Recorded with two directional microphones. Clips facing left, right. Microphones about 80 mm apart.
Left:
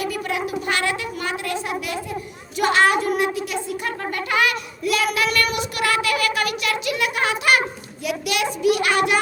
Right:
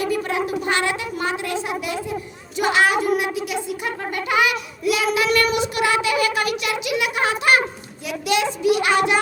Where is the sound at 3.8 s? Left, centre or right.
Centre.